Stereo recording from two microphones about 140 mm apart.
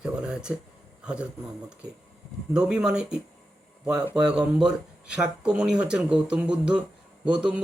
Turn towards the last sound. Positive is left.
turn(degrees=-10)  # may be behind; listen again after turning